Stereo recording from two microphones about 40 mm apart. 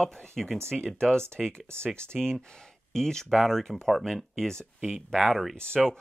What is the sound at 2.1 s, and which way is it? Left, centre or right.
Speech, centre.